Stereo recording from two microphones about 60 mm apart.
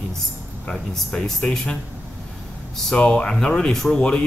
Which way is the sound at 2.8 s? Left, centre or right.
Centre.